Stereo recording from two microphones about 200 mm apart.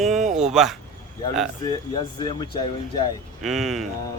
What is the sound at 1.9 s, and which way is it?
Speech, 20° left (ahead or behind).